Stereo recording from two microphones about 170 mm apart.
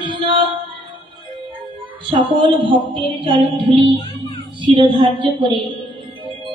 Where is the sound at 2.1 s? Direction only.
30° right (ahead or behind).